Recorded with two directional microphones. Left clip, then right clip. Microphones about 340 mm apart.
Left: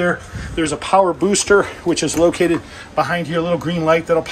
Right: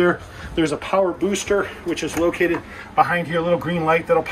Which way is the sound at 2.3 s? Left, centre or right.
Left.